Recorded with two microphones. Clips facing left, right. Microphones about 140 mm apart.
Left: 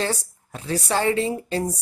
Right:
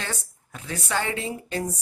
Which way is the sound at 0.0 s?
35° left (ahead or behind).